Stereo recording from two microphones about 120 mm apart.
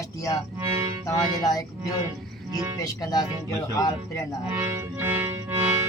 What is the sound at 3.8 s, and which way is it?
Speech, 30° left (ahead or behind).